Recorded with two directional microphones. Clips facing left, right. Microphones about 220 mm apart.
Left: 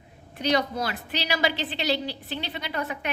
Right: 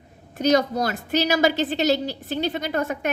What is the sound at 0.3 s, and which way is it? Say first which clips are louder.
A woman's voice: right 6 dB; 45° right (ahead or behind).